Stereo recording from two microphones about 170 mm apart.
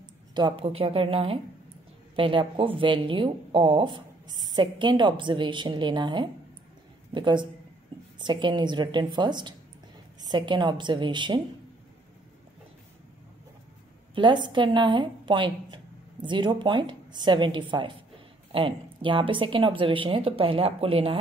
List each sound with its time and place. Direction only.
0.3 s a woman's voice: 25° right (ahead or behind)
14.1 s a woman's voice: 30° right (ahead or behind)